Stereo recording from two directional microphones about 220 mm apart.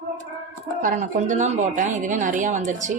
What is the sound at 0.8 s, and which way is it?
A woman's voice, 35° right (ahead or behind).